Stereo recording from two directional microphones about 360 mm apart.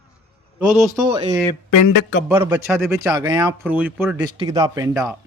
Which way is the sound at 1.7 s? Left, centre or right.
Left.